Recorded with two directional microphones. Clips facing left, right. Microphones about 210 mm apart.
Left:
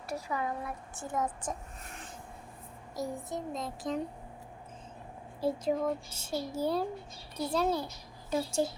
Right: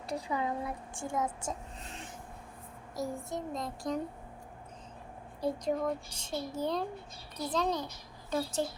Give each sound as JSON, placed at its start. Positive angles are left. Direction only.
{"t": 0.1, "sound": "speech", "side_deg": -20}
{"t": 1.0, "sound": "speech", "side_deg": -10}
{"t": 1.8, "sound": "filing", "side_deg": -25}
{"t": 2.9, "sound": "a child's voice", "side_deg": 0}
{"t": 5.4, "sound": "a child's voice", "side_deg": 5}